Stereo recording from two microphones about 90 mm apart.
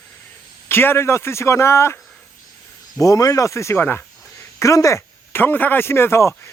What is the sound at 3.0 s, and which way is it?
Speech, 40° left (ahead or behind).